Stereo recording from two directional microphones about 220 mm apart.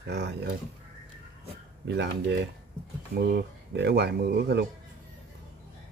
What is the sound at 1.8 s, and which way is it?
Speech, 55° right (ahead or behind).